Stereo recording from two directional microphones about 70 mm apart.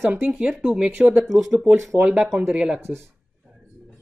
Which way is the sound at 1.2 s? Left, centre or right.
Centre.